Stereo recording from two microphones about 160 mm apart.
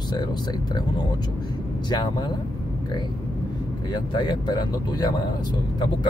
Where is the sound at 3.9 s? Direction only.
30° left (ahead or behind).